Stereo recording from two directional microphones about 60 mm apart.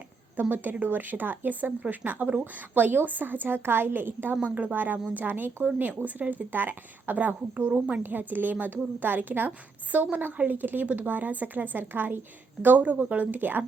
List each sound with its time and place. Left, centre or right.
0.5 s a woman's voice: right